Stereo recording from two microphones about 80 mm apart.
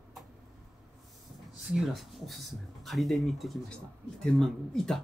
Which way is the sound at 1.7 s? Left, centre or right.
Centre.